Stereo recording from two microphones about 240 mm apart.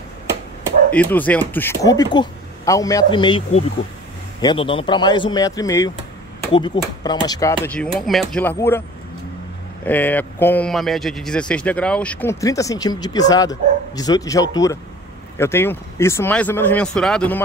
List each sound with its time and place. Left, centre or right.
0.9 s a man's voice: centre
9.8 s a man's voice: centre